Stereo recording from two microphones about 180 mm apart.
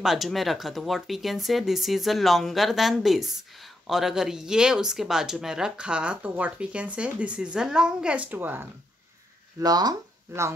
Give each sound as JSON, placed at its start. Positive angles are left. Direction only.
{"t": 0.0, "sound": "speech", "side_deg": 0}
{"t": 9.6, "sound": "speech", "side_deg": -20}